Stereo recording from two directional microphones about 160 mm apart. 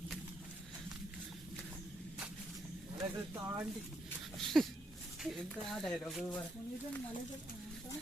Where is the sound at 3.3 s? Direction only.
15° right (ahead or behind).